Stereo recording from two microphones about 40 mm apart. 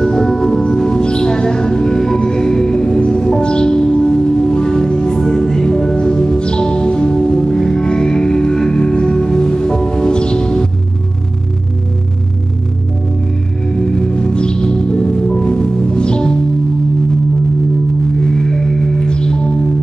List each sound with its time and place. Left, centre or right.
0.0 s music: centre
13.7 s music: centre
18.2 s music: centre